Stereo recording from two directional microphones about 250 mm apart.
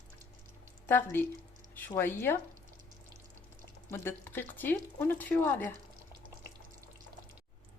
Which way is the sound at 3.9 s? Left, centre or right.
Centre.